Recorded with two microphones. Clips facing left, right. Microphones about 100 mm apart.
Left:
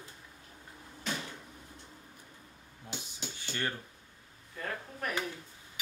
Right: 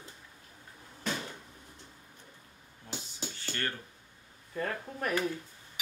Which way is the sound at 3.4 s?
15° left (ahead or behind).